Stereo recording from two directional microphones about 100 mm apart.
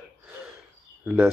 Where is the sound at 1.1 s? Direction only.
15° right (ahead or behind).